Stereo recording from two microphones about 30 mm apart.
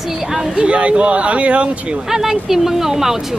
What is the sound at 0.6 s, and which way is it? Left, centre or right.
Speech, right.